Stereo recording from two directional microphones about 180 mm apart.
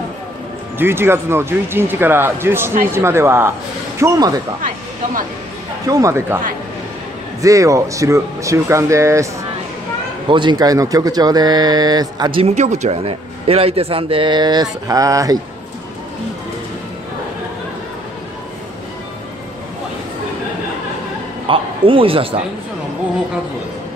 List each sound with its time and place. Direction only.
0.7 s speech: 15° right (ahead or behind)
5.9 s speech: 20° right (ahead or behind)
7.4 s speech: 20° right (ahead or behind)
21.5 s a man's voice: 30° right (ahead or behind)